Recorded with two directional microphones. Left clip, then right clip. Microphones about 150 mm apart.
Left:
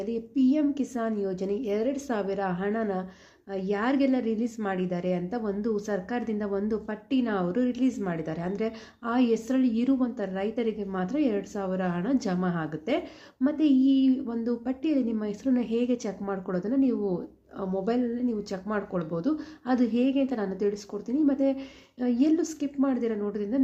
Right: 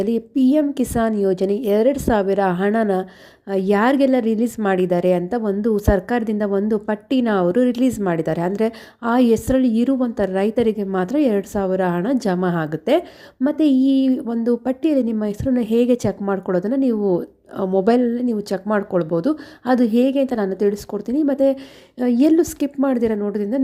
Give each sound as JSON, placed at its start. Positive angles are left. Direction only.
{"t": 0.0, "sound": "a woman's voice", "side_deg": -60}